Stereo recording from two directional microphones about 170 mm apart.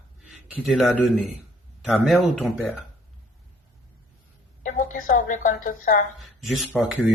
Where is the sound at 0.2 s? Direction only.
Centre (ahead or behind).